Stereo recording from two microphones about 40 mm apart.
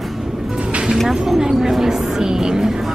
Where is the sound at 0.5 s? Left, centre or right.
Right.